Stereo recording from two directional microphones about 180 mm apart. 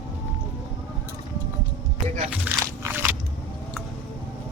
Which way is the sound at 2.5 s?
10° right (ahead or behind).